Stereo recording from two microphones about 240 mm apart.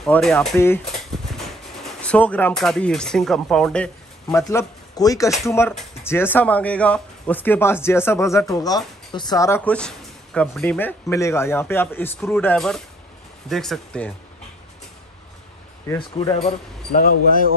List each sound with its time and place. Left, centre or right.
0.0 s speech: centre
15.9 s speech: centre